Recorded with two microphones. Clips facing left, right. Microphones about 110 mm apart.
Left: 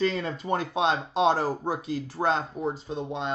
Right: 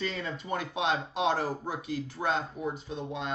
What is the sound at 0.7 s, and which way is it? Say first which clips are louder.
A man's voice: left 4 dB; 30° left (ahead or behind).